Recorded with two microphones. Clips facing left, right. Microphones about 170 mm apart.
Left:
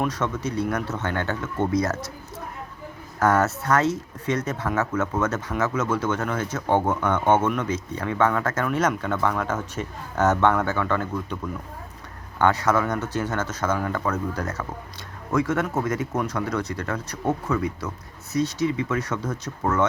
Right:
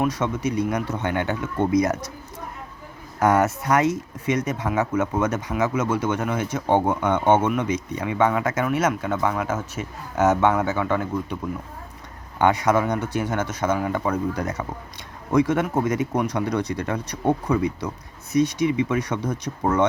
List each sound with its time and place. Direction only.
0.0 s speech: 10° right (ahead or behind)
3.2 s speech: 15° right (ahead or behind)
12.4 s speech: 15° right (ahead or behind)